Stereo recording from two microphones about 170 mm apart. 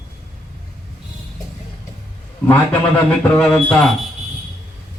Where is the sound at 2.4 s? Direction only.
10° left (ahead or behind).